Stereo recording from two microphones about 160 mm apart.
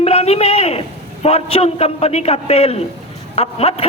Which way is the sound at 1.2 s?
40° left (ahead or behind).